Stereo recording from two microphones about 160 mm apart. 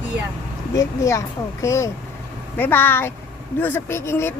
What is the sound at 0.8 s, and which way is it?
A woman's voice, 20° left (ahead or behind).